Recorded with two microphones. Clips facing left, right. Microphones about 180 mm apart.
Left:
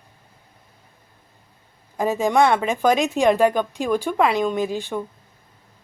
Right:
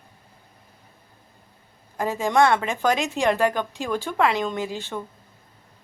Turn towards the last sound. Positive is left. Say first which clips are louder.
# left 5 dB
turn(degrees=15)  # may be behind; listen again after turning